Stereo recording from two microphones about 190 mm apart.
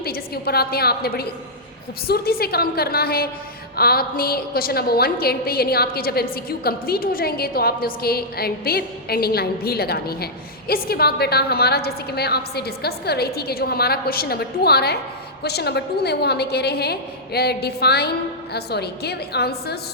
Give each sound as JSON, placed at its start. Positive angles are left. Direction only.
{"t": 0.0, "sound": "a woman's voice", "side_deg": 55}